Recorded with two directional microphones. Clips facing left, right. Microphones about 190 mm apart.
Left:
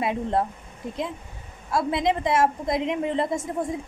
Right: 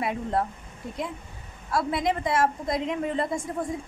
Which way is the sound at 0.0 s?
25° left (ahead or behind).